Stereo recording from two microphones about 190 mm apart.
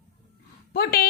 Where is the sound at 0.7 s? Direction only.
55° left (ahead or behind).